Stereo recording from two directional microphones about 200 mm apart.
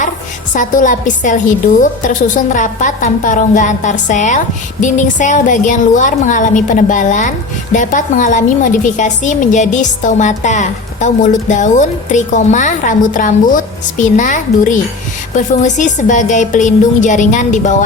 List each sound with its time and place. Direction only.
0.5 s a woman's voice: 40° left (ahead or behind)